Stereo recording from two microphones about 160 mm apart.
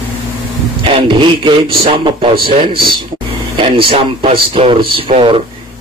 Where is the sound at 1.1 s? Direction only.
30° right (ahead or behind).